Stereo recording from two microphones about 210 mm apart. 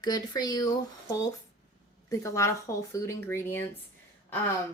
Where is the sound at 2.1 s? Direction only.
15° left (ahead or behind).